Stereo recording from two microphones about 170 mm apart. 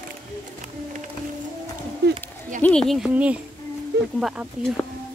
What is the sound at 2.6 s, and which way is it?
A woman's voice, 5° left (ahead or behind).